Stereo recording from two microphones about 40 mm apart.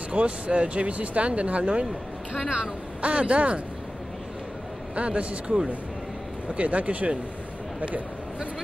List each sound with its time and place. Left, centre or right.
0.1 s speech: right
4.9 s speech: right